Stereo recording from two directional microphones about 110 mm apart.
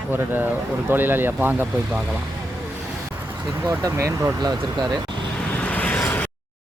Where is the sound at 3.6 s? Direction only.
30° right (ahead or behind).